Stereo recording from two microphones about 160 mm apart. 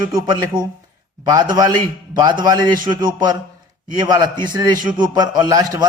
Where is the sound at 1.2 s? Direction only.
25° right (ahead or behind).